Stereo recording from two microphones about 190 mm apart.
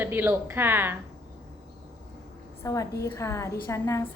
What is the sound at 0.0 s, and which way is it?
Speech, 10° right (ahead or behind).